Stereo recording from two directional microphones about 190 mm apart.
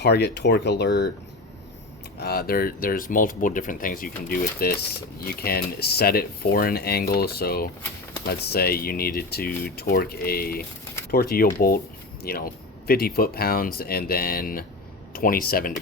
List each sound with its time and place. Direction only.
0.0 s speech: 60° left (ahead or behind)
2.1 s speech: 55° left (ahead or behind)